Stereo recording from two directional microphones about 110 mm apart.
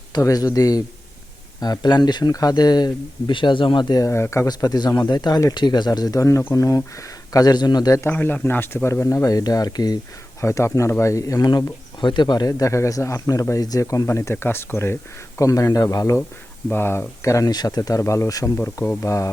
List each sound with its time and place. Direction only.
0.1 s speech: 35° left (ahead or behind)
4.4 s speech: 40° left (ahead or behind)
8.0 s speech: 20° left (ahead or behind); by 10.0 s 35° left (ahead or behind)
10.4 s speech: 25° left (ahead or behind)
16.6 s speech: 20° left (ahead or behind)